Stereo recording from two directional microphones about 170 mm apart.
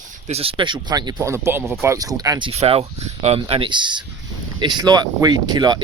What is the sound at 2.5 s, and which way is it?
Speech, 35° right (ahead or behind).